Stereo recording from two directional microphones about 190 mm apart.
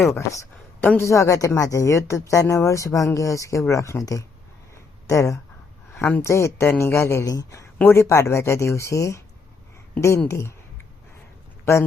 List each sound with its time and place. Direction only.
0.1 s a woman's voice: 15° left (ahead or behind)
11.6 s a man's voice: 15° left (ahead or behind)